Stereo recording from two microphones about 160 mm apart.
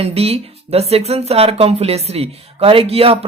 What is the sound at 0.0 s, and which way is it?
Speech, 40° right (ahead or behind).